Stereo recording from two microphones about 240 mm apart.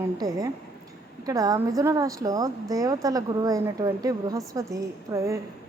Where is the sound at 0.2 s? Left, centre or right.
Centre.